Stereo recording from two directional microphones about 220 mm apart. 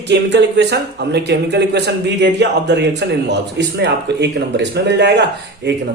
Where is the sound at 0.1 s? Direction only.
50° right (ahead or behind).